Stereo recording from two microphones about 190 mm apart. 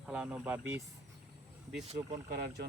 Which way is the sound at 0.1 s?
5° right (ahead or behind).